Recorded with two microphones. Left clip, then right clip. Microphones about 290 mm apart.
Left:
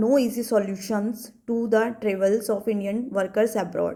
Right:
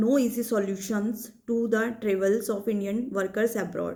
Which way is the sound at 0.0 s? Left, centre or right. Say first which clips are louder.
Left 3 dB; centre.